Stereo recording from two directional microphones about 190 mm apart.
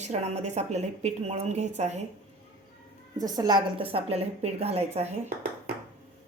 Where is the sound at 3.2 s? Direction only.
20° right (ahead or behind).